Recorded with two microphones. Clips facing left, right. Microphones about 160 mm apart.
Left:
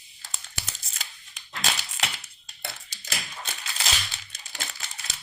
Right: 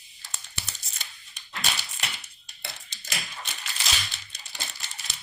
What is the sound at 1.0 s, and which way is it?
Tearing, 90° left.